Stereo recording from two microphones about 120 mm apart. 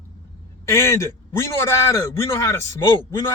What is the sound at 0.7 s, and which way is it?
A man's voice, 20° left (ahead or behind).